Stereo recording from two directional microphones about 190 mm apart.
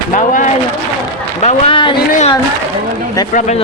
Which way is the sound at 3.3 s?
35° left (ahead or behind).